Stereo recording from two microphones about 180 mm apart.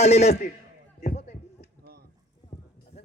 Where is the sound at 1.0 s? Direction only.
40° left (ahead or behind).